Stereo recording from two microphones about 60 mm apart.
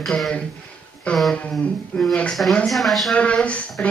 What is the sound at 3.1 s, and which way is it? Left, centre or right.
Speech, left.